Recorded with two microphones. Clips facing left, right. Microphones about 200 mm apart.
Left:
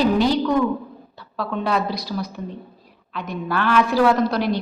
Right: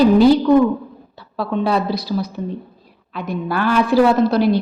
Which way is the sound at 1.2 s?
30° right (ahead or behind).